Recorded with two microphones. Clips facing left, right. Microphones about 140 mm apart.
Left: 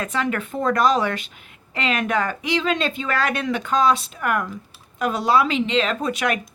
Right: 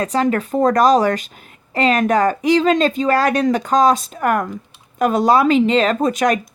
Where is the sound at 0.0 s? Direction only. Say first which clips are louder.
Right 7 dB; 40° right (ahead or behind).